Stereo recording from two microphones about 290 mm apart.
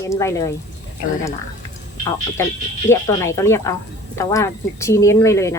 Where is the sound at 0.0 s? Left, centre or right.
Centre.